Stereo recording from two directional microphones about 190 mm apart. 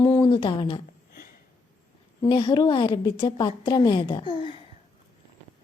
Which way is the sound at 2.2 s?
25° left (ahead or behind).